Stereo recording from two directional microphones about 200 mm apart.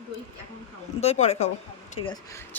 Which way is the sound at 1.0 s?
30° left (ahead or behind).